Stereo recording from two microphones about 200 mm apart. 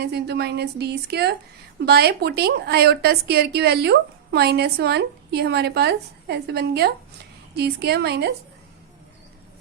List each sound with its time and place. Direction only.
0.0 s a woman's voice: 55° right (ahead or behind)